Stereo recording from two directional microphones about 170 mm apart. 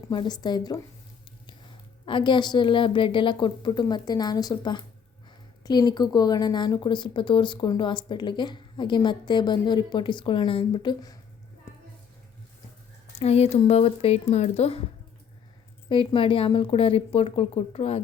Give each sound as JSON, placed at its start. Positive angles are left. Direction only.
{"t": 0.1, "sound": "speech", "side_deg": 25}
{"t": 13.1, "sound": "a woman's voice", "side_deg": 35}
{"t": 15.9, "sound": "a woman's voice", "side_deg": 30}